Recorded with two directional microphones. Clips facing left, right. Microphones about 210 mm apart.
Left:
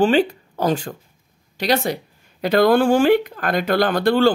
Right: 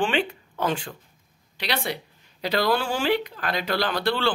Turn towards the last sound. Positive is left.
turn(degrees=50)  # may be behind; listen again after turning